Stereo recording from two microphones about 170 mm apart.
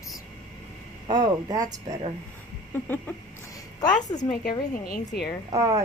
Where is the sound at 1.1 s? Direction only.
20° right (ahead or behind).